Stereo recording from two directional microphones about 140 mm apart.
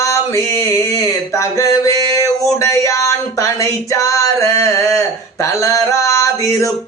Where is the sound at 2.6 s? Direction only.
20° left (ahead or behind).